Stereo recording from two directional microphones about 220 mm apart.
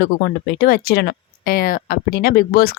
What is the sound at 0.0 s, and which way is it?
A woman's voice, 40° left (ahead or behind).